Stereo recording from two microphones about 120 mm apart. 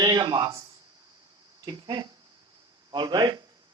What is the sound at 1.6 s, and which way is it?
Speech, 30° right (ahead or behind).